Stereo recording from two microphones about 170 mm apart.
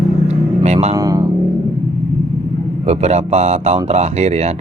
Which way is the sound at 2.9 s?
40° right (ahead or behind).